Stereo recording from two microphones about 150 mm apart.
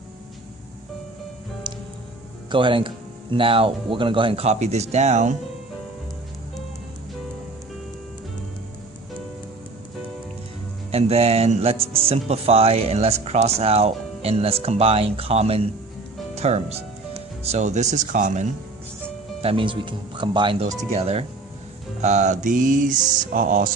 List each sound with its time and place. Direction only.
1.7 s music: 30° right (ahead or behind)
2.5 s speech: 35° right (ahead or behind); by 5.4 s 50° right (ahead or behind)
10.9 s speech: 45° right (ahead or behind)
19.4 s speech: 40° right (ahead or behind)
22.0 s music: 50° right (ahead or behind); by 23.7 s 65° right (ahead or behind)